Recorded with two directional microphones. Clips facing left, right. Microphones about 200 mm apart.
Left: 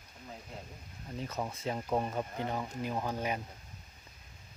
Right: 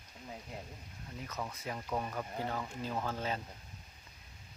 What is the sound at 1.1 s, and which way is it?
Speech, 30° left (ahead or behind).